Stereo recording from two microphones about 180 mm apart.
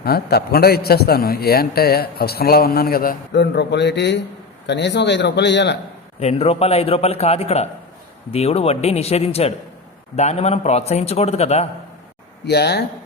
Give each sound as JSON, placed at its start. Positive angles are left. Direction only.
{"t": 0.0, "sound": "a man's voice", "side_deg": 60}
{"t": 6.1, "sound": "a man's voice", "side_deg": 35}
{"t": 12.5, "sound": "a man's voice", "side_deg": 65}